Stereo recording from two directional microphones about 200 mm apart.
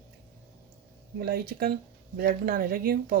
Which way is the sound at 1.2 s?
50° right (ahead or behind).